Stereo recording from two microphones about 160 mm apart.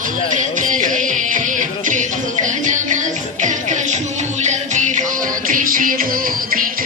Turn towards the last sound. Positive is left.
turn(degrees=-60)  # may be behind; listen again after turning